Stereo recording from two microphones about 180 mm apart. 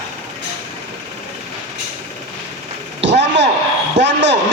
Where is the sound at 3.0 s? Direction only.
80° right.